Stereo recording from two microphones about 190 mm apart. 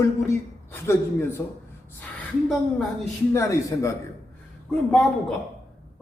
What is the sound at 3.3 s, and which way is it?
Speech, 15° left (ahead or behind).